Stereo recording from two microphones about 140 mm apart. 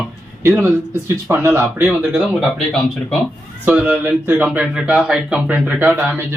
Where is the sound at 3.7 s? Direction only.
10° right (ahead or behind).